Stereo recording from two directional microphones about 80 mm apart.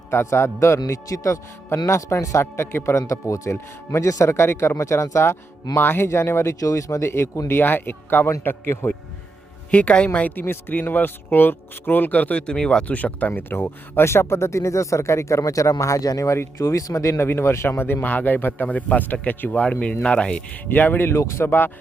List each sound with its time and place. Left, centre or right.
0.1 s speech: left
9.7 s speech: centre
20.7 s speech: left